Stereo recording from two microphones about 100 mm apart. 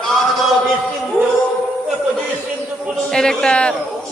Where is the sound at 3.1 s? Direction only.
5° left (ahead or behind).